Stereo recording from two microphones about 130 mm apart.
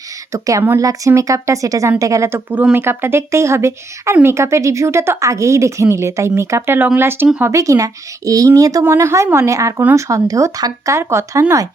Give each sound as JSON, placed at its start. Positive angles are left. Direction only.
{"t": 0.3, "sound": "speech", "side_deg": -25}